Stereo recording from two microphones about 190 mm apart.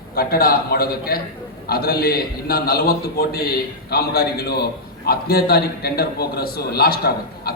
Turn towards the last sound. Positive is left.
turn(degrees=55)  # may be behind; listen again after turning